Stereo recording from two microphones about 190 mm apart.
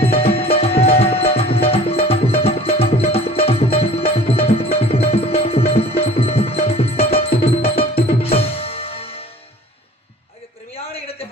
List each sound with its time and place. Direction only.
0.0 s music: 30° left (ahead or behind)